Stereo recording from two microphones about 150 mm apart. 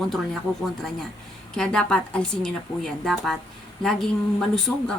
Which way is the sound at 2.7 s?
20° left (ahead or behind).